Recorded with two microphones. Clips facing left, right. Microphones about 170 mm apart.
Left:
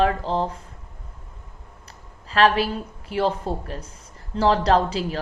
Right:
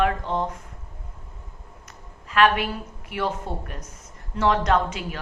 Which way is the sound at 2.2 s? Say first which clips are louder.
Left 1 dB; 35° left (ahead or behind).